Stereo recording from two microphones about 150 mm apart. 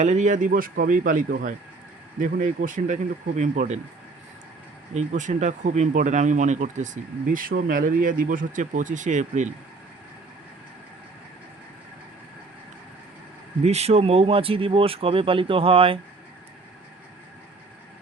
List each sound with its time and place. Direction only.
0.0 s speech: 50° right (ahead or behind)
4.9 s speech: 50° right (ahead or behind)
13.6 s speech: 45° right (ahead or behind)